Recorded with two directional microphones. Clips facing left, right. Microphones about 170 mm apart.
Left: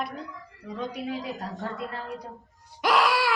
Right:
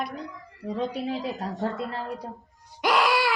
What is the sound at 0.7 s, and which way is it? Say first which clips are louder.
Speech: right 4 dB; 30° right (ahead or behind).